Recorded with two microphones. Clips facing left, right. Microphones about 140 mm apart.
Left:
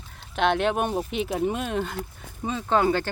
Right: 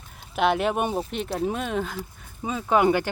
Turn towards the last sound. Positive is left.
turn(degrees=-15)  # may be behind; listen again after turning